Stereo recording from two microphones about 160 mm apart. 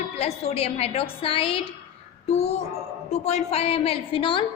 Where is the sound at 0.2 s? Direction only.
40° left (ahead or behind).